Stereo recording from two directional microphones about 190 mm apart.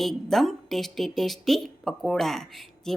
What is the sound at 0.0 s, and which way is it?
Speech, centre (ahead or behind).